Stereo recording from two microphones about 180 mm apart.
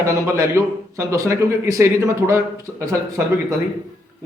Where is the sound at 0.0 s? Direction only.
15° right (ahead or behind).